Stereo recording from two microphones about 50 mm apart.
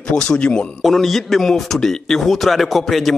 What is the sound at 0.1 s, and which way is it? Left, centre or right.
Speech, centre.